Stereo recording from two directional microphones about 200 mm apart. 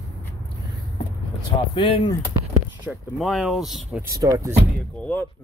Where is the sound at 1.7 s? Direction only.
25° left (ahead or behind).